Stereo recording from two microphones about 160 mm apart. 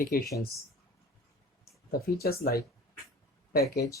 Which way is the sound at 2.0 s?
70° left (ahead or behind).